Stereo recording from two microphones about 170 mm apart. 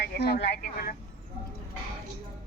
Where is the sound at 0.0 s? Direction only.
70° left (ahead or behind).